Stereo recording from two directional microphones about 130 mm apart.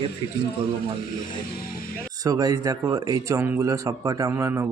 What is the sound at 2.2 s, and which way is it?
Speech, 25° right (ahead or behind).